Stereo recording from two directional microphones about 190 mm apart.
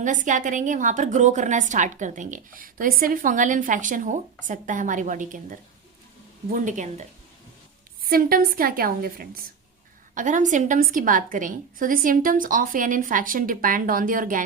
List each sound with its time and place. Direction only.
0.0 s a woman's voice: 40° right (ahead or behind)
8.1 s a woman's voice: 50° right (ahead or behind)